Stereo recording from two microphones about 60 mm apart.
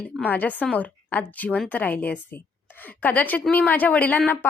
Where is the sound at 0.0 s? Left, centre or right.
Left.